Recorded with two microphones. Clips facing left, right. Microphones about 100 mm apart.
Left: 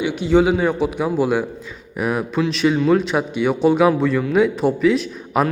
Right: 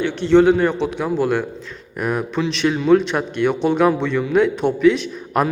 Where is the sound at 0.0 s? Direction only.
10° left (ahead or behind).